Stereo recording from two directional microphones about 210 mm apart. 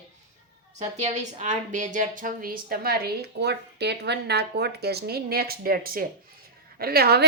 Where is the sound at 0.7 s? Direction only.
35° right (ahead or behind).